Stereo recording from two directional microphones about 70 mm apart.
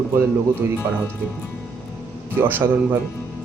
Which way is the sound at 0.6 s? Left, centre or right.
Right.